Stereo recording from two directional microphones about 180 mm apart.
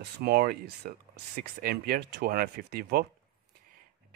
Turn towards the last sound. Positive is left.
turn(degrees=-60)  # may be behind; listen again after turning